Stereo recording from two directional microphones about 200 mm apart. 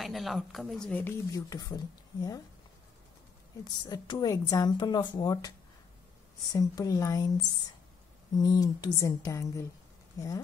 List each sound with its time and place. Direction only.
0.0 s speech: centre (ahead or behind); by 1.8 s 15° left (ahead or behind)
3.6 s speech: 20° left (ahead or behind)
6.5 s speech: 15° left (ahead or behind)
8.4 s speech: 20° left (ahead or behind)